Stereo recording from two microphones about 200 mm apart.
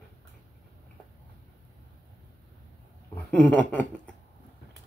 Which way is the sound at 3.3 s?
5° left (ahead or behind).